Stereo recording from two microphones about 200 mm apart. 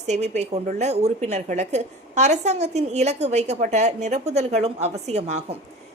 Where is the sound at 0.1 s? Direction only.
35° right (ahead or behind).